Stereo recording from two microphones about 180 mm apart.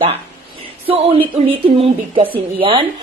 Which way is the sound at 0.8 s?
30° right (ahead or behind).